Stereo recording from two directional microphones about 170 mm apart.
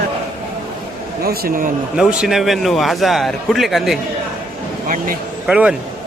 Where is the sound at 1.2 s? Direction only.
60° right (ahead or behind).